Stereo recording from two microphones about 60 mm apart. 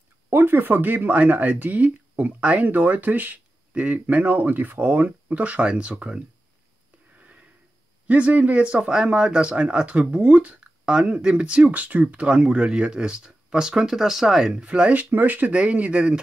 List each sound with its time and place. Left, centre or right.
0.3 s speech: right; by 6.2 s centre
7.2 s sniff: right
8.1 s speech: right